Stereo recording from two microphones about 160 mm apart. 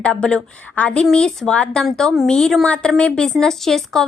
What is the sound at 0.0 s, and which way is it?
A woman's voice, 5° left (ahead or behind).